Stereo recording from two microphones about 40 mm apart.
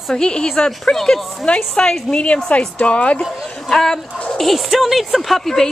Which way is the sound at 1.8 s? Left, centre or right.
Left.